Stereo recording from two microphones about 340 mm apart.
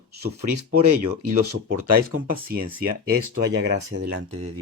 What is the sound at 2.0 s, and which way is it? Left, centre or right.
Speech, right.